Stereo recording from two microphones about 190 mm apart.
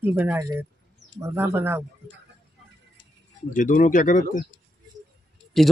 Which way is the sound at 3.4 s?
45° left (ahead or behind).